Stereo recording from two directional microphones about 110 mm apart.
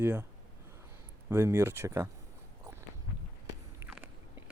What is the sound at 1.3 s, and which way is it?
Speech, 20° right (ahead or behind).